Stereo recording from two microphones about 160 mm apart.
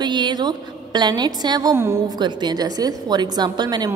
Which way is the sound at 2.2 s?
30° right (ahead or behind).